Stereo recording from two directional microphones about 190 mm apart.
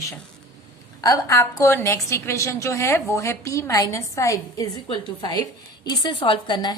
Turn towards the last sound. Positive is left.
turn(degrees=25)  # may be behind; listen again after turning